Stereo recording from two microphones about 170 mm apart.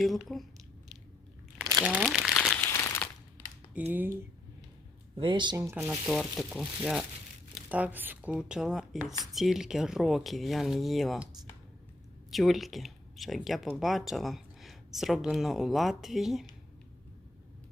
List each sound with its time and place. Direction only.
0.0 s speech: centre (ahead or behind)
1.8 s speech: 5° right (ahead or behind)
2.0 s crumpling: centre (ahead or behind); by 3.5 s 15° left (ahead or behind)
3.8 s speech: 10° right (ahead or behind)
5.1 s speech: 30° right (ahead or behind)
5.8 s speech: centre (ahead or behind)
12.3 s speech: centre (ahead or behind)